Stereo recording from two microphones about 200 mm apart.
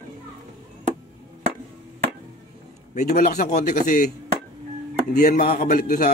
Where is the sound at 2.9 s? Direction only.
40° left (ahead or behind).